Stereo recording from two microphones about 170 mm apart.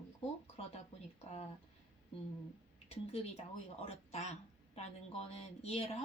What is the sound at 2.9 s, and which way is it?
A woman's voice, 40° left (ahead or behind).